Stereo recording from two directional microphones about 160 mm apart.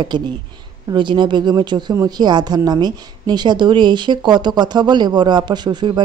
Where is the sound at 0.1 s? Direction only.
30° right (ahead or behind).